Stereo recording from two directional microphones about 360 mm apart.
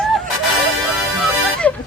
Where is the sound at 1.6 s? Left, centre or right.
Centre.